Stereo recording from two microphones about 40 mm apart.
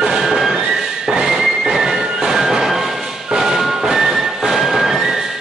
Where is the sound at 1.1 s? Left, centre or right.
Centre.